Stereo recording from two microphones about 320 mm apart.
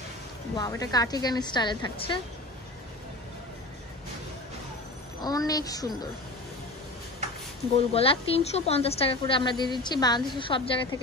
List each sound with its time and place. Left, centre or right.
0.6 s a woman's voice: centre
5.2 s a woman's voice: centre
7.7 s a woman's voice: centre